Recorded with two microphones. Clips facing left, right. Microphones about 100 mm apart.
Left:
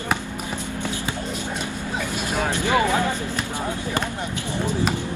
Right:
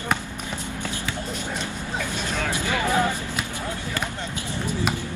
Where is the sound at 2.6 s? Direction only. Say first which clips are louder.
Left 9 dB; 20° left (ahead or behind).